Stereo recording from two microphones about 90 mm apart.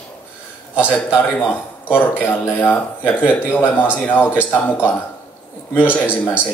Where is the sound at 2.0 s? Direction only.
15° left (ahead or behind).